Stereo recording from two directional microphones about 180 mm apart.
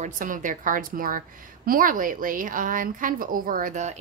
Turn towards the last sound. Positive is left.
turn(degrees=-45)  # may be behind; listen again after turning